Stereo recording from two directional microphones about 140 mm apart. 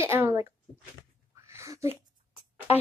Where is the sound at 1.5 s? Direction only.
20° right (ahead or behind).